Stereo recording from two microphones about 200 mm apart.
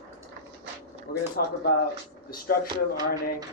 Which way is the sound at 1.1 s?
50° left (ahead or behind).